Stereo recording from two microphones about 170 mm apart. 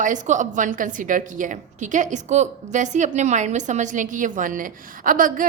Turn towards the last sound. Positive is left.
turn(degrees=-55)  # may be behind; listen again after turning